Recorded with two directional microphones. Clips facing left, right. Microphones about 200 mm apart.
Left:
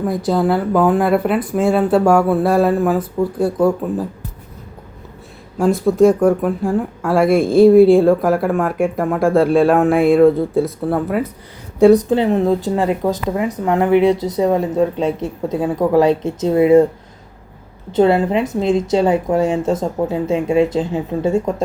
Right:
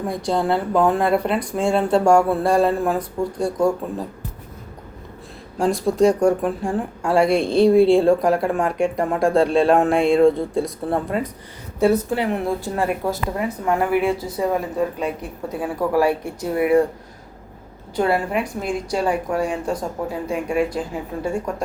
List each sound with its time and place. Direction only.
0.1 s speech: 5° left (ahead or behind)
5.5 s speech: centre (ahead or behind)
11.8 s speech: 15° left (ahead or behind)
17.9 s speech: 25° left (ahead or behind)